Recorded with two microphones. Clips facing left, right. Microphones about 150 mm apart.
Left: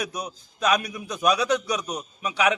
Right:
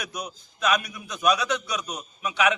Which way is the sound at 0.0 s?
35° left (ahead or behind).